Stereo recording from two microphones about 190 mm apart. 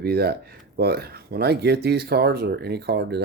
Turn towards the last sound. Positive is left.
turn(degrees=-60)  # may be behind; listen again after turning